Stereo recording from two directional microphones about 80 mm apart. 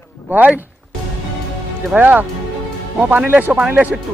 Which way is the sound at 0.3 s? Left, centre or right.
Right.